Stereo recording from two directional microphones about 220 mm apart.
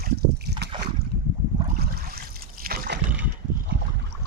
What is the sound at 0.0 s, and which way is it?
Boat, 45° right (ahead or behind).